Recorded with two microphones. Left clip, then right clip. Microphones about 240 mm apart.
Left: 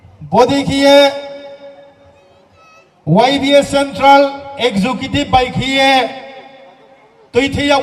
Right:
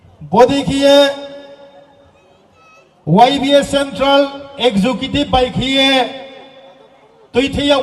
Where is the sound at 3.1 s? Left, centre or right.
Left.